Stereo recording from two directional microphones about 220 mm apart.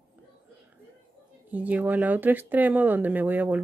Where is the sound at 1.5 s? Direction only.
5° right (ahead or behind).